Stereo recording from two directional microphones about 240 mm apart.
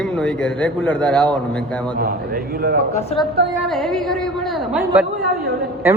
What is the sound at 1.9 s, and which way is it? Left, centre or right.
Speech, right.